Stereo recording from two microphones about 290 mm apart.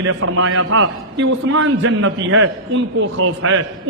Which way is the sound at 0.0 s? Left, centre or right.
Right.